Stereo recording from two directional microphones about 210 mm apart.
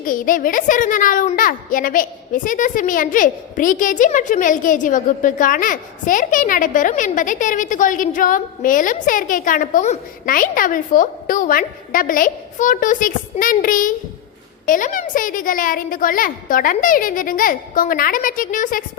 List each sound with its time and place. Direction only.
0.0 s a child's voice: 40° left (ahead or behind)